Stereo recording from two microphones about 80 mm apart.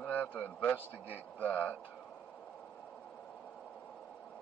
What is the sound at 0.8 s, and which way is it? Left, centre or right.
Speech, right.